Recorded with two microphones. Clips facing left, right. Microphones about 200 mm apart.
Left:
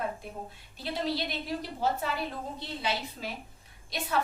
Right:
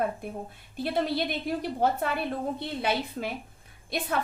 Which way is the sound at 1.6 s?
55° right (ahead or behind).